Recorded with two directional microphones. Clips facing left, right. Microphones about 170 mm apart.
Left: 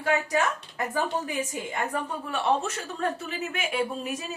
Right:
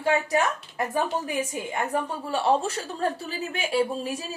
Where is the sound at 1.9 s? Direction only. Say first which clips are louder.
Right 3 dB; 30° right (ahead or behind).